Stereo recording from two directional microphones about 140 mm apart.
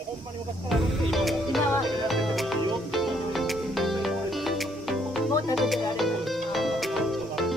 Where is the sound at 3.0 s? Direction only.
Centre (ahead or behind).